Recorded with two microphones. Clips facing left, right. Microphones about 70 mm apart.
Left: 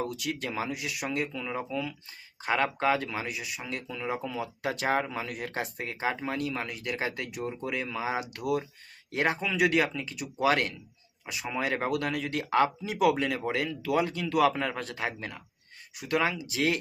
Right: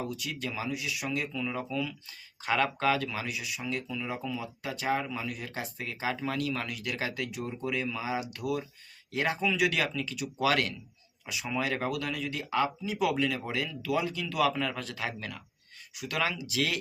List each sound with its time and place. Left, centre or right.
0.0 s speech: left
1.3 s speech: left
5.0 s speech: left
9.1 s speech: left
11.9 s speech: left
13.1 s speech: left